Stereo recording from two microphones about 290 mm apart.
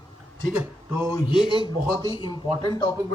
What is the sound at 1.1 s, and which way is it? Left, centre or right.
Speech, centre.